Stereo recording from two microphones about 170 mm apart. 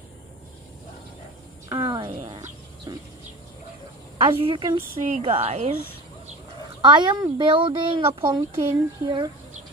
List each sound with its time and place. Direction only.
1.7 s a sound: 25° right (ahead or behind)
4.3 s a woman's voice: 30° right (ahead or behind)
6.8 s speech: 25° right (ahead or behind)